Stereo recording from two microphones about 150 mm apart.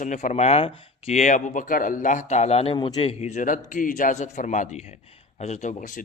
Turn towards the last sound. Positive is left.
turn(degrees=50)  # may be behind; listen again after turning